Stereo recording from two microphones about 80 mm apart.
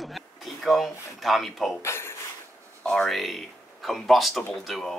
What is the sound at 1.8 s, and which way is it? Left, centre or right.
Speech, left.